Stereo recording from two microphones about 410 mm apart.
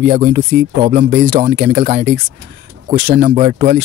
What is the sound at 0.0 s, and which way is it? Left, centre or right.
Speech, right.